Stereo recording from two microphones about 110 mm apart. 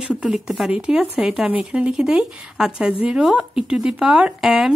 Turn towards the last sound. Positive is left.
turn(degrees=-5)  # may be behind; listen again after turning